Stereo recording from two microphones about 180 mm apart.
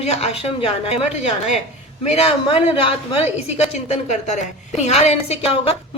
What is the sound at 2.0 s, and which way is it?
Speech, 35° left (ahead or behind).